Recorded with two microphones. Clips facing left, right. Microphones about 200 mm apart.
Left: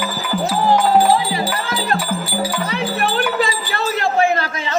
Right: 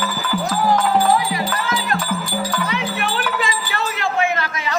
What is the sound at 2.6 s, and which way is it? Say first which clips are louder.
Wind chime: left 3 dB; 35° left (ahead or behind).